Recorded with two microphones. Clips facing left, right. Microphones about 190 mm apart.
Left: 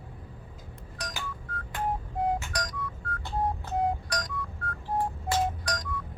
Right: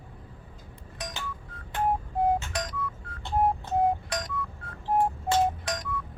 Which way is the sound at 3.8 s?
25° right (ahead or behind).